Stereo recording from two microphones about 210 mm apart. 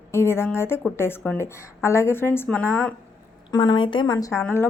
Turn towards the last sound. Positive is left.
turn(degrees=10)  # may be behind; listen again after turning